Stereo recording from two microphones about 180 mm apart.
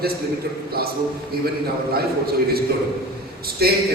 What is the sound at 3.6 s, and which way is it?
Speech, 60° right (ahead or behind).